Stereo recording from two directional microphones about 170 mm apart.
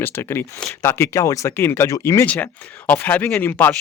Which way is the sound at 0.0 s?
15° left (ahead or behind).